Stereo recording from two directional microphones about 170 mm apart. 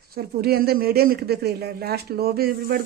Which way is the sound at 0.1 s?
60° right (ahead or behind).